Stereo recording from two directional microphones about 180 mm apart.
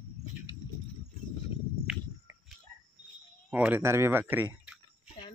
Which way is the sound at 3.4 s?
10° right (ahead or behind).